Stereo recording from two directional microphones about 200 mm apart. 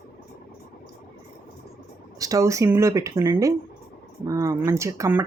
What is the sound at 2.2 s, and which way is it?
Speech, 15° right (ahead or behind).